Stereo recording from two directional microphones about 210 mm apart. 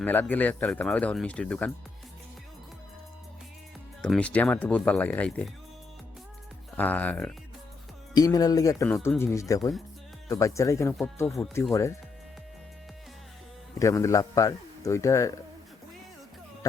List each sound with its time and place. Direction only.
0.0 s speech: 10° left (ahead or behind)
4.0 s speech: 5° left (ahead or behind)
6.7 s speech: 5° left (ahead or behind)
8.1 s speech: 20° left (ahead or behind); by 11.5 s centre (ahead or behind)
11.7 s speech: 15° left (ahead or behind)
13.7 s speech: 15° left (ahead or behind)